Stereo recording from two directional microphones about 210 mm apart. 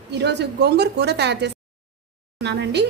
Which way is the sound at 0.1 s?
55° right (ahead or behind).